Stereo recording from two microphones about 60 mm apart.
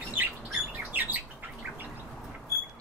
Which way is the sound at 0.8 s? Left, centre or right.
Right.